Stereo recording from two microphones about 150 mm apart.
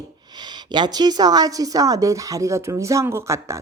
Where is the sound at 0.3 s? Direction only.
30° right (ahead or behind).